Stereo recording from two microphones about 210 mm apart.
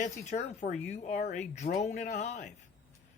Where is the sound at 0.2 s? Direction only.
35° left (ahead or behind).